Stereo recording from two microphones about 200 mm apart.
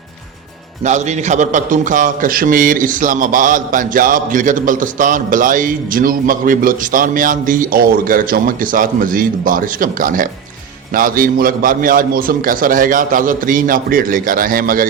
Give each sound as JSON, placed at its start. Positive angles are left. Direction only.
{"t": 0.9, "sound": "a man's voice", "side_deg": -35}